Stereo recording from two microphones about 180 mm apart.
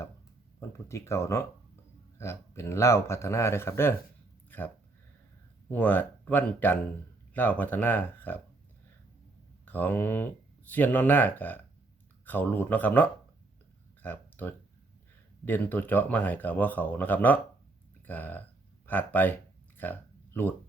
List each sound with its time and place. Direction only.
0.9 s speech: 15° left (ahead or behind)
5.6 s speech: 10° left (ahead or behind)
9.6 s speech: 10° left (ahead or behind)
14.0 s a sound: 10° left (ahead or behind)
15.4 s speech: 10° left (ahead or behind)
19.7 s a sound: 10° left (ahead or behind)